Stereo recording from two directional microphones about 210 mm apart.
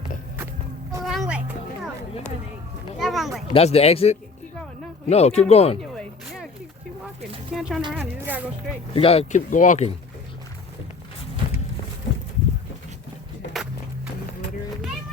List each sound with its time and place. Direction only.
1.0 s music: centre (ahead or behind)
3.0 s a sound: centre (ahead or behind)
3.5 s speech: 30° left (ahead or behind)
5.9 s a sound: centre (ahead or behind)
7.5 s a woman's voice: centre (ahead or behind)
8.9 s speech: 25° left (ahead or behind)